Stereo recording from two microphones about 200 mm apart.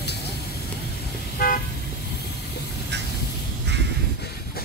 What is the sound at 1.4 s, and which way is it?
Car, 45° left (ahead or behind).